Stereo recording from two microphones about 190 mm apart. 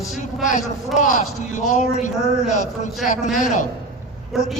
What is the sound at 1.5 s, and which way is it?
Speech, 40° left (ahead or behind).